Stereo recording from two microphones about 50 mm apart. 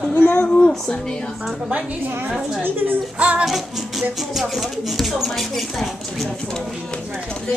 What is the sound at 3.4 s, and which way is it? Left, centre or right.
A woman's voice, centre.